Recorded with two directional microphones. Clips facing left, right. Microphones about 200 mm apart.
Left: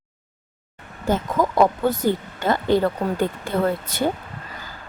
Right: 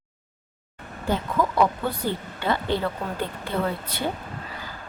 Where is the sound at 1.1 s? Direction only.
45° left (ahead or behind).